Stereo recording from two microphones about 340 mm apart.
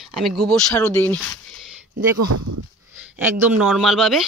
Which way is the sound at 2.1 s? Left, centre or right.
Right.